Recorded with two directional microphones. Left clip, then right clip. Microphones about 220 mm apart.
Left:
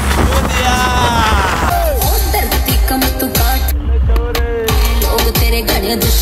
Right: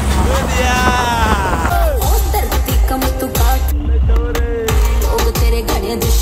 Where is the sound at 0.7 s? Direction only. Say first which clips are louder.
Left 1 dB; 20° right (ahead or behind).